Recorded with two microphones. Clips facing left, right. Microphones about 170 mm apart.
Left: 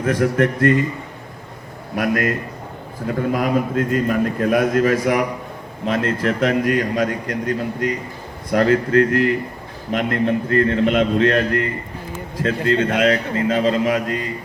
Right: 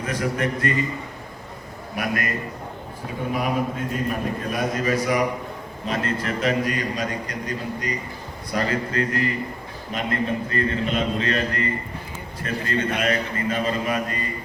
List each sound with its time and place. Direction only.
0.0 s a man's voice: 55° left (ahead or behind)
2.0 s a man's voice: 85° left; by 5.2 s 65° left (ahead or behind)
5.8 s a man's voice: 80° left
12.4 s a man's voice: 90° left